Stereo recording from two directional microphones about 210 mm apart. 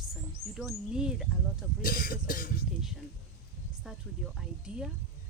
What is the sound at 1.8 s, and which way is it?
Speech, 45° left (ahead or behind).